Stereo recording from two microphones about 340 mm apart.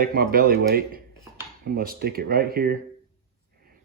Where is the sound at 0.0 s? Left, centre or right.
Right.